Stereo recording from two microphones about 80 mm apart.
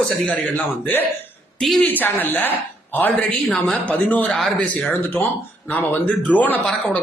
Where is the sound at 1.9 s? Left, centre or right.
Left.